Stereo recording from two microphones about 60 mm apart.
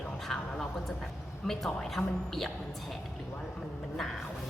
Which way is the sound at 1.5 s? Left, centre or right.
Centre.